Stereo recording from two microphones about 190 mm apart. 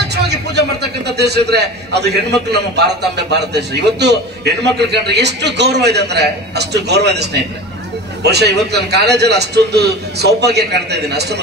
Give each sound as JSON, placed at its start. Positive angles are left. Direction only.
{"t": 0.0, "sound": "a man's voice", "side_deg": -60}